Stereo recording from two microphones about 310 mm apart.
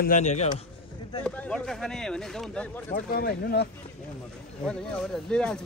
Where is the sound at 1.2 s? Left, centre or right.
Centre.